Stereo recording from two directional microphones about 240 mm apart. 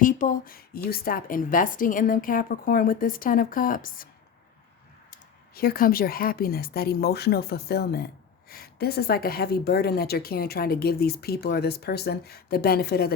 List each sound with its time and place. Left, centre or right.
0.0 s speech: left
5.1 s speech: left